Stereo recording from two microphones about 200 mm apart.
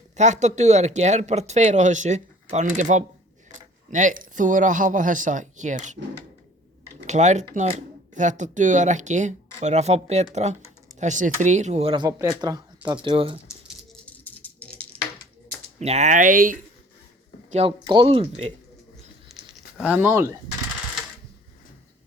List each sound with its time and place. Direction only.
0.2 s speech: 35° right (ahead or behind)
7.1 s speech: 35° right (ahead or behind)
13.7 s a sound: 10° left (ahead or behind)
15.8 s speech: 35° right (ahead or behind)
17.5 s speech: 30° right (ahead or behind)
19.3 s a sound: centre (ahead or behind)